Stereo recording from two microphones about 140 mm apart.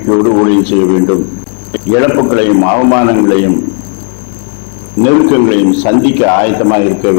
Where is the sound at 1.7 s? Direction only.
15° left (ahead or behind).